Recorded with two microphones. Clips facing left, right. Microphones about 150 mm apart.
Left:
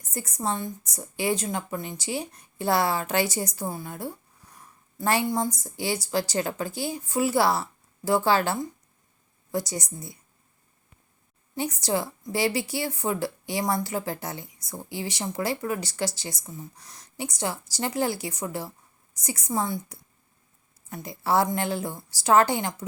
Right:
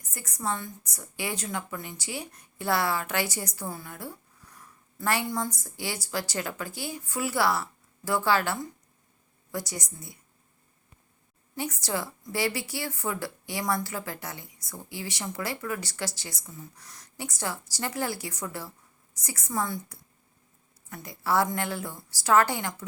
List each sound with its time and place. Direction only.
0.0 s a woman's voice: 25° left (ahead or behind)
4.5 s a sound: 20° left (ahead or behind)
5.5 s a woman's voice: 25° left (ahead or behind)
11.5 s a woman's voice: 20° left (ahead or behind)